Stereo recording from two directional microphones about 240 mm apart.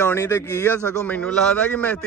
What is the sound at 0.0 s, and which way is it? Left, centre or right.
A man's voice, centre.